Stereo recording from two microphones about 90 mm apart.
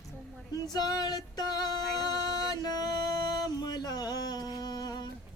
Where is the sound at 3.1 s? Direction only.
45° left (ahead or behind).